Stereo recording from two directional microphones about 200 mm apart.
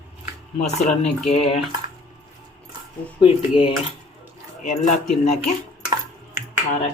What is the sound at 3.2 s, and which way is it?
Speech, 25° left (ahead or behind).